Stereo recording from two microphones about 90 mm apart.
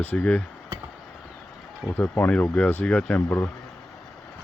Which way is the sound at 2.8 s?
10° left (ahead or behind).